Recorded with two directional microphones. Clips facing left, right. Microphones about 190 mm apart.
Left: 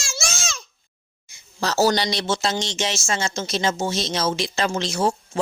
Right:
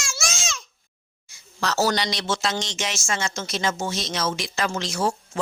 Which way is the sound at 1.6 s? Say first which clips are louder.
Left 3 dB; 30° left (ahead or behind).